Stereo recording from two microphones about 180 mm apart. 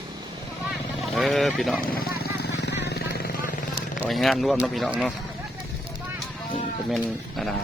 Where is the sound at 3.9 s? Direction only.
Centre (ahead or behind).